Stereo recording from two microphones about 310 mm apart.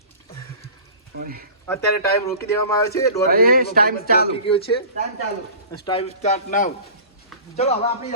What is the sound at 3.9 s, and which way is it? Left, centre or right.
Speech, left.